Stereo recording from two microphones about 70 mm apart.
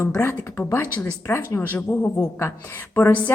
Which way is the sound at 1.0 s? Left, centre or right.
Left.